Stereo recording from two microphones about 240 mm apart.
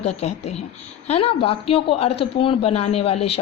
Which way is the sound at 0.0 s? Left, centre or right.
Left.